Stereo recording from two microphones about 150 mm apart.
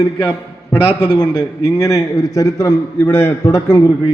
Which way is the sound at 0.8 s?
35° left (ahead or behind).